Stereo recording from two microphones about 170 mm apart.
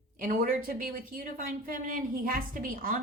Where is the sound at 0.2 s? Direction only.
50° right (ahead or behind).